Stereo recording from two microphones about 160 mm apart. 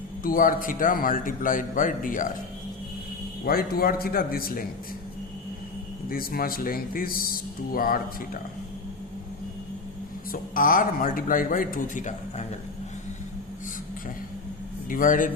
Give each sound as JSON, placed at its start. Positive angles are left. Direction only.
{"t": 0.2, "sound": "speech", "side_deg": 60}
{"t": 3.4, "sound": "a man's voice", "side_deg": 70}
{"t": 6.1, "sound": "speech", "side_deg": 65}
{"t": 10.3, "sound": "speech", "side_deg": 60}
{"t": 14.8, "sound": "a man's voice", "side_deg": 55}